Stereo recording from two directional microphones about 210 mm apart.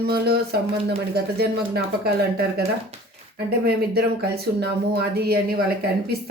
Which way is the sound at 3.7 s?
45° right (ahead or behind).